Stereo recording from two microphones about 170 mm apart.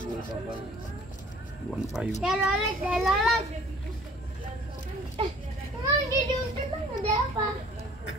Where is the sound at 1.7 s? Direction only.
5° right (ahead or behind).